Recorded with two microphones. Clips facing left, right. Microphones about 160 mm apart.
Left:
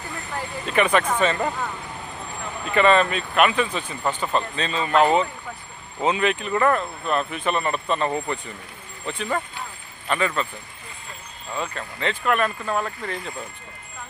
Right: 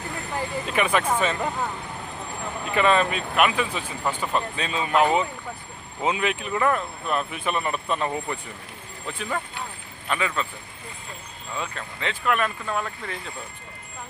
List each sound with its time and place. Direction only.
0.7 s speech: 5° right (ahead or behind)
11.5 s speech: centre (ahead or behind)